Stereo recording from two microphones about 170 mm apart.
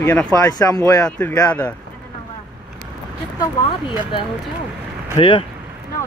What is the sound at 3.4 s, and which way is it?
Speech, 30° left (ahead or behind).